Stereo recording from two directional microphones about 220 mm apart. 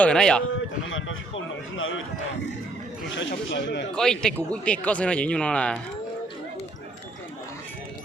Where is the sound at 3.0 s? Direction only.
55° left (ahead or behind).